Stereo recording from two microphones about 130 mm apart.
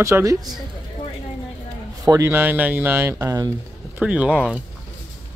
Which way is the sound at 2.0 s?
25° right (ahead or behind).